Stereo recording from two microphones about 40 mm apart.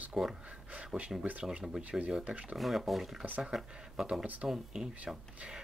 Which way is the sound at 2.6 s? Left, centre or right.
Centre.